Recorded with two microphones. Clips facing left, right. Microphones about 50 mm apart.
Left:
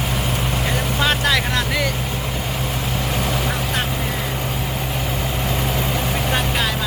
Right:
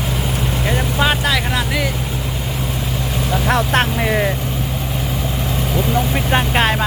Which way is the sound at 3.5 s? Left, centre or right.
Right.